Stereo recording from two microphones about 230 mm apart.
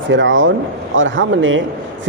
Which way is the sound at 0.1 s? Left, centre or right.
Right.